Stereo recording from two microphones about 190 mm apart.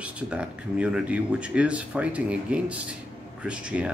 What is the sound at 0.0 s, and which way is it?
Speech, 5° right (ahead or behind).